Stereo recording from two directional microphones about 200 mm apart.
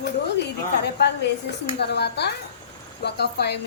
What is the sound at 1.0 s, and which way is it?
A woman's voice, 55° left (ahead or behind).